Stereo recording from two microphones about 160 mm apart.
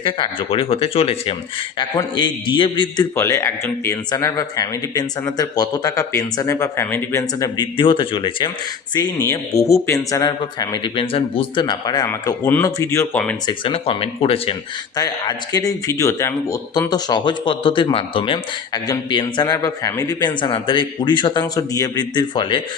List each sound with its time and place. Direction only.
0.0 s speech: 35° left (ahead or behind)
3.2 s speech: 20° left (ahead or behind)
9.0 s speech: 20° left (ahead or behind)
13.5 s speech: 35° left (ahead or behind)
14.9 s speech: 25° left (ahead or behind)